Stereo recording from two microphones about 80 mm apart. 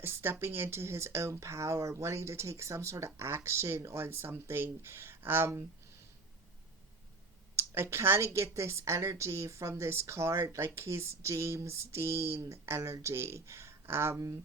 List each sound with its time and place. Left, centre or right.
0.0 s a woman's voice: right
7.5 s a woman's voice: right